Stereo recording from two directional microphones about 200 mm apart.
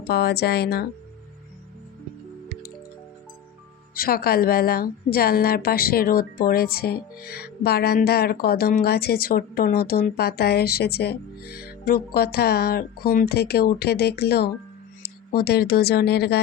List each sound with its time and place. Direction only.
0.0 s a woman's voice: 55° left (ahead or behind)
3.9 s a woman's voice: 45° left (ahead or behind)